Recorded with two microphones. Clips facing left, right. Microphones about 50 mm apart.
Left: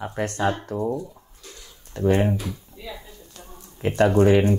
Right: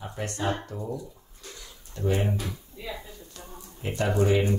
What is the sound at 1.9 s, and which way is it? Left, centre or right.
Speech, left.